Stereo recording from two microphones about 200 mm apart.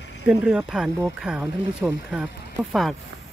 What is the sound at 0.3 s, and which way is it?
Speech, 5° right (ahead or behind).